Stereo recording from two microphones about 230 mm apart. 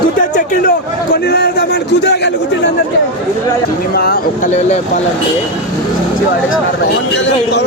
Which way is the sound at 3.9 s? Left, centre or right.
Left.